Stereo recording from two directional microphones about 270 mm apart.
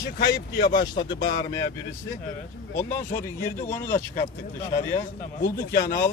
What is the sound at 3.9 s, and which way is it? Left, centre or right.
Speech, left.